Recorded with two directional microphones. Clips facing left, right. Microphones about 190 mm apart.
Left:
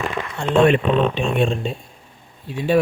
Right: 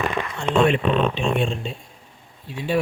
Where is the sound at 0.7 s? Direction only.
55° left (ahead or behind).